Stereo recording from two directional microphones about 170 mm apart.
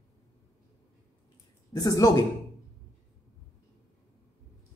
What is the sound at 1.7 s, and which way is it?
Speech, 20° left (ahead or behind).